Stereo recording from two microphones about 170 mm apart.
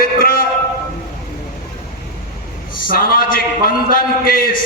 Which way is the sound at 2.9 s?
60° left (ahead or behind).